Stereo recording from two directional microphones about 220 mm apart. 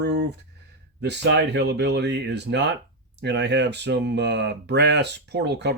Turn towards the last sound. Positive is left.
turn(degrees=-50)  # may be behind; listen again after turning